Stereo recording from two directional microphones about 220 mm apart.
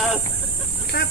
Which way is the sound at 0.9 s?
45° left (ahead or behind).